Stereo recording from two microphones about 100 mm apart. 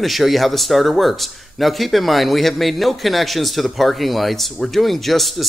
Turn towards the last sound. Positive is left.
turn(degrees=0)  # may be behind; listen again after turning